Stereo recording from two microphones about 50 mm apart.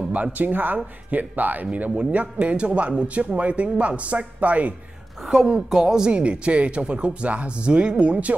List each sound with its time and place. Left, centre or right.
0.1 s speech: right
5.7 s speech: centre